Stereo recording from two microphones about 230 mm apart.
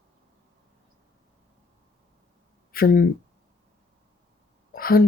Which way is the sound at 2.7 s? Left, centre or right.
Left.